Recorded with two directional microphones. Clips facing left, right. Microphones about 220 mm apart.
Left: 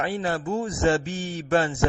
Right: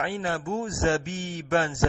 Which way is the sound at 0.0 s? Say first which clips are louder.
Left 3 dB; 35° left (ahead or behind).